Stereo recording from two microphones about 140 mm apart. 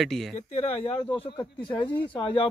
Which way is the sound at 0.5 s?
40° left (ahead or behind).